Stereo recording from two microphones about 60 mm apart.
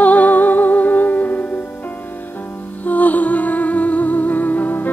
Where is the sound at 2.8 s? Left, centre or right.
Left.